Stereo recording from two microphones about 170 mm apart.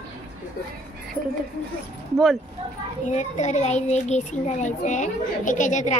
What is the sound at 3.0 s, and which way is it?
A child's voice, 45° left (ahead or behind).